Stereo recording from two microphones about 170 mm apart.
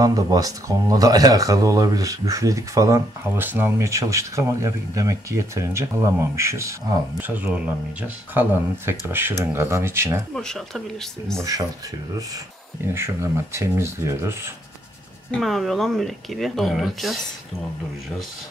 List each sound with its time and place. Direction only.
0.0 s speech: 20° right (ahead or behind)
10.3 s speech: 5° left (ahead or behind)
12.8 s speech: 15° right (ahead or behind)
15.4 s speech: centre (ahead or behind)